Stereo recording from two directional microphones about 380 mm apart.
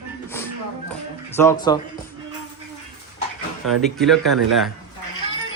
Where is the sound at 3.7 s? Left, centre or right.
Centre.